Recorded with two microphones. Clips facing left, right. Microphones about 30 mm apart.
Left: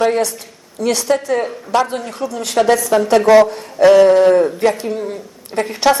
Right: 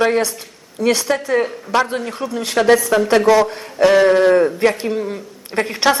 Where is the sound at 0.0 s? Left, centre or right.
Centre.